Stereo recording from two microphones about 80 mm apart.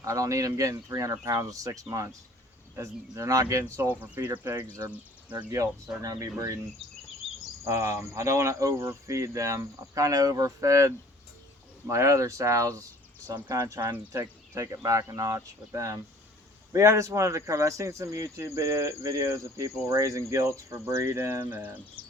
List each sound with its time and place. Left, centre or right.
0.0 s speech: right
4.0 s speech: right
6.0 s speech: right
7.6 s speech: right
13.8 s speech: right
22.0 s music: right